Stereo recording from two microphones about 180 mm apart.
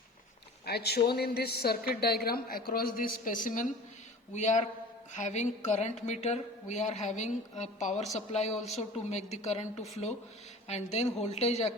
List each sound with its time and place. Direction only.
0.6 s a woman's voice: 60° left (ahead or behind); by 11.7 s 35° left (ahead or behind)